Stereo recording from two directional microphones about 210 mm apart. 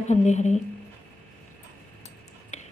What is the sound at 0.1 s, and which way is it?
Speech, 35° left (ahead or behind).